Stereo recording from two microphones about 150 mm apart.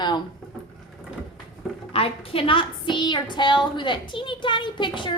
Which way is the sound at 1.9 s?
40° left (ahead or behind).